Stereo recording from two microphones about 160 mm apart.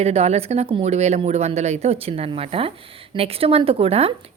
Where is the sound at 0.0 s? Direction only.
40° right (ahead or behind).